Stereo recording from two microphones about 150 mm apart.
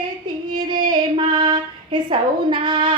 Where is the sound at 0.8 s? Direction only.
30° right (ahead or behind).